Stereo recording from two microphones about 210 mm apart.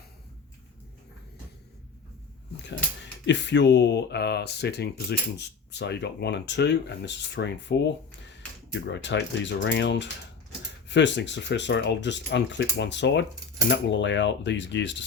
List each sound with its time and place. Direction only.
3.2 s speech: 55° left (ahead or behind)